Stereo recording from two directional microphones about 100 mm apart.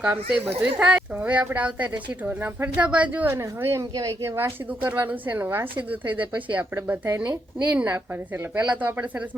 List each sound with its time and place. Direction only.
0.0 s a woman's voice: 10° right (ahead or behind)
3.2 s speech: 25° right (ahead or behind)
4.4 s a woman's voice: 20° right (ahead or behind)